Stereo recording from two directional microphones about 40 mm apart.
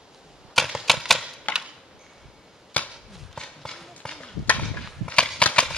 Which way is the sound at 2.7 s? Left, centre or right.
Left.